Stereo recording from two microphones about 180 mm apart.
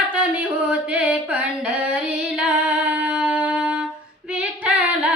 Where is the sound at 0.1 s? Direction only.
5° right (ahead or behind).